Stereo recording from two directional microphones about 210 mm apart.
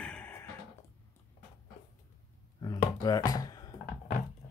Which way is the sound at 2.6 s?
20° left (ahead or behind).